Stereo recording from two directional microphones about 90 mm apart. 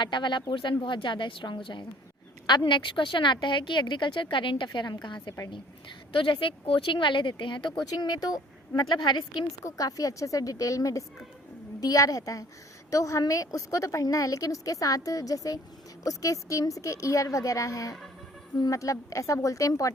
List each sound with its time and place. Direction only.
0.0 s a woman's voice: 60° left (ahead or behind)
6.1 s a woman's voice: 70° left (ahead or behind)
7.9 s speech: 50° left (ahead or behind)
9.6 s a woman's voice: 40° left (ahead or behind)